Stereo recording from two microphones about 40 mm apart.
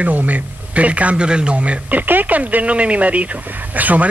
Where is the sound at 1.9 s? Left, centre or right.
Right.